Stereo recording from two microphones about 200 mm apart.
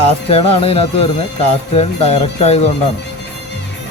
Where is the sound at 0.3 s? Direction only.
30° left (ahead or behind).